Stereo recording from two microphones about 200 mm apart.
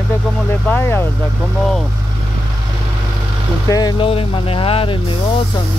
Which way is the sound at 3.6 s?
20° left (ahead or behind).